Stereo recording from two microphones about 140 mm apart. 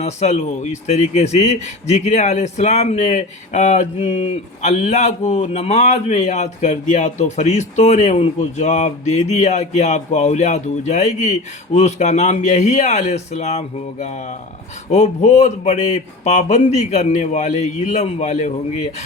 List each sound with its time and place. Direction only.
0.0 s speech: 50° left (ahead or behind)